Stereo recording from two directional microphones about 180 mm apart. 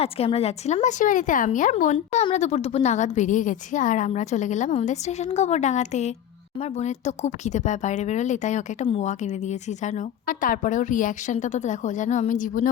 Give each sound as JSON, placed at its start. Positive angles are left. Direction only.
{"t": 0.0, "sound": "speech", "side_deg": 35}